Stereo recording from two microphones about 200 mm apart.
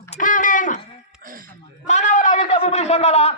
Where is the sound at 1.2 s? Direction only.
45° right (ahead or behind).